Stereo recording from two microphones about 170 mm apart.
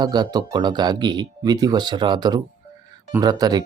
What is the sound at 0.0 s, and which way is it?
Speech, 25° right (ahead or behind).